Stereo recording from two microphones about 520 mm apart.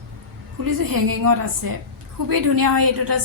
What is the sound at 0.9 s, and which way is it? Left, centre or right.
A woman's voice, right.